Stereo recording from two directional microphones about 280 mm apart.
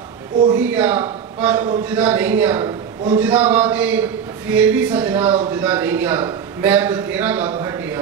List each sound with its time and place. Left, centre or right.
0.5 s a man's voice: centre